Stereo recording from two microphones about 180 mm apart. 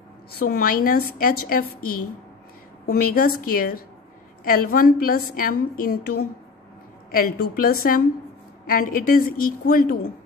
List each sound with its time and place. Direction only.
0.3 s a woman's voice: 55° left (ahead or behind)
2.9 s a woman's voice: 55° left (ahead or behind)